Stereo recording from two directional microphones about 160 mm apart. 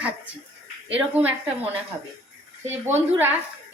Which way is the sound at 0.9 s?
10° right (ahead or behind).